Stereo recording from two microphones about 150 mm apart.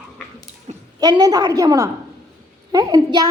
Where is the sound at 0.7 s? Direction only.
45° right (ahead or behind).